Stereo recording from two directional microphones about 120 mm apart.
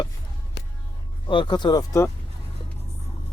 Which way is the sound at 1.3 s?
40° left (ahead or behind).